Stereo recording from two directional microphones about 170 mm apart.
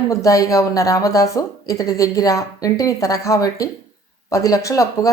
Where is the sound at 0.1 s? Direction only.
20° left (ahead or behind).